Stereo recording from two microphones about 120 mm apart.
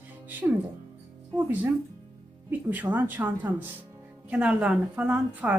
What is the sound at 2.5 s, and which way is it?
Speech, 15° right (ahead or behind).